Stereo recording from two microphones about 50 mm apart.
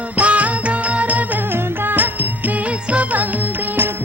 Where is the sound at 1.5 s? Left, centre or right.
Right.